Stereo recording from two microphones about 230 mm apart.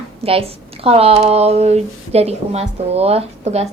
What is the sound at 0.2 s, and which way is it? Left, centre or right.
A woman's voice, right.